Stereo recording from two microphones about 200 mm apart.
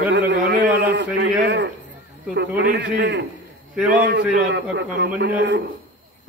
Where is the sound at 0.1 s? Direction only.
60° right (ahead or behind).